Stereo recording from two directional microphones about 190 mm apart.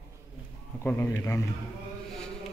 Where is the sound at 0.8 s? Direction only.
10° left (ahead or behind).